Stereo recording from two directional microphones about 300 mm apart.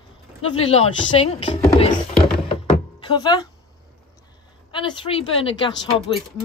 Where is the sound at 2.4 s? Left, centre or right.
Centre.